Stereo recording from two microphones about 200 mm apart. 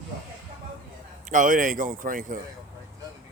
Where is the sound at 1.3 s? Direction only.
40° right (ahead or behind).